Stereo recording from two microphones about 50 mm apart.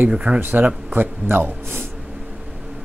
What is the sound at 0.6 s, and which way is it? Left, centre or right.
Speech, right.